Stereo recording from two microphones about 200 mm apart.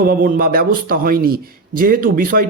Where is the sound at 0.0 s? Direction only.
50° right (ahead or behind).